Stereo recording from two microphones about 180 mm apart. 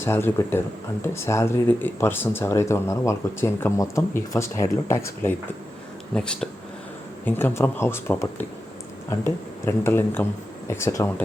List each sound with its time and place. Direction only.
0.0 s speech: 15° left (ahead or behind)
6.1 s speech: 5° left (ahead or behind)